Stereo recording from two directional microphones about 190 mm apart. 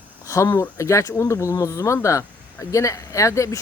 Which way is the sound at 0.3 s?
15° left (ahead or behind).